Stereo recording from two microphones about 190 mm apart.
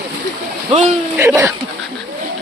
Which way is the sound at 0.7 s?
30° right (ahead or behind).